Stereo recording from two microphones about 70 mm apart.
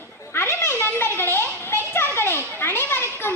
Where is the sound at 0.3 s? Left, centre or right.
Left.